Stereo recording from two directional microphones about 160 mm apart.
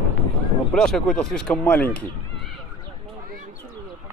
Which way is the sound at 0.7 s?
5° left (ahead or behind).